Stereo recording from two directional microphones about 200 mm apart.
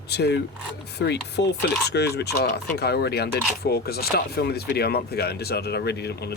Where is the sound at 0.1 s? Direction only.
55° left (ahead or behind).